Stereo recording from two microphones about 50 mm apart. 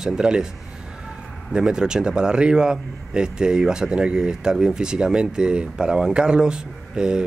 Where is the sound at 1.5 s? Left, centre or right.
Centre.